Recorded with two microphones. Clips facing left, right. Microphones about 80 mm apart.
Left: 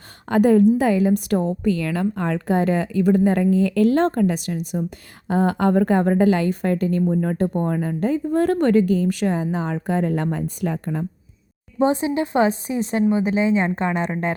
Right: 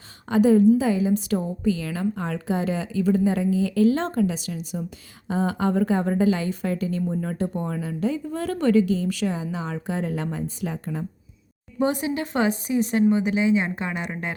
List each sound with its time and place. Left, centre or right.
0.3 s a woman's voice: left
11.8 s a woman's voice: left